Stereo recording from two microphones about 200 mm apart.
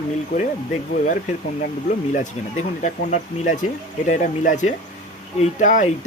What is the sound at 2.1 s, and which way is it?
Speech, 35° left (ahead or behind).